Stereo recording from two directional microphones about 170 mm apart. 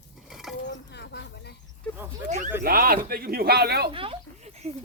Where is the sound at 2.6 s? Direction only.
60° right (ahead or behind).